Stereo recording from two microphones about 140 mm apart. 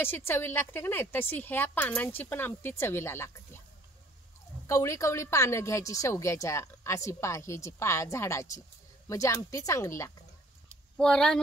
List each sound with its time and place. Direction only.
0.0 s a woman's voice: 15° left (ahead or behind)
4.6 s a woman's voice: 20° left (ahead or behind)
10.7 s a sound: 5° left (ahead or behind)